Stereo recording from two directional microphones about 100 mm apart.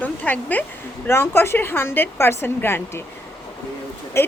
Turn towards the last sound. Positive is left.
turn(degrees=25)  # may be behind; listen again after turning